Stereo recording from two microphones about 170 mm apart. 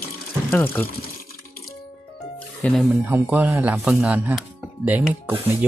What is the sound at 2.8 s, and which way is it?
Speech, 10° right (ahead or behind).